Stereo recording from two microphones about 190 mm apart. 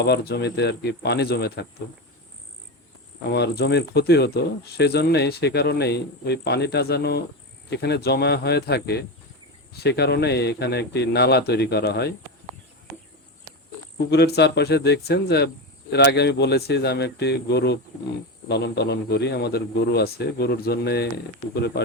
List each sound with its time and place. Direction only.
0.0 s speech: 60° left (ahead or behind)
3.2 s speech: 60° left (ahead or behind)
14.3 s speech: 60° left (ahead or behind)